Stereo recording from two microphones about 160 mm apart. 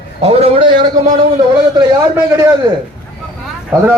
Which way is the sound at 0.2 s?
40° right (ahead or behind).